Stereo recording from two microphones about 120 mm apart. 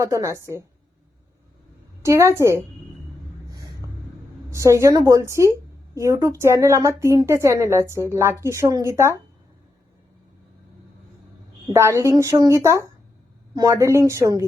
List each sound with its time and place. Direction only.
0.0 s a woman's voice: 25° right (ahead or behind)
2.0 s a woman's voice: 25° right (ahead or behind)
4.5 s a woman's voice: 25° right (ahead or behind)
11.7 s a woman's voice: 20° right (ahead or behind)